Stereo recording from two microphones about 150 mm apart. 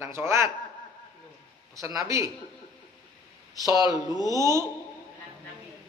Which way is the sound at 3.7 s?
25° right (ahead or behind).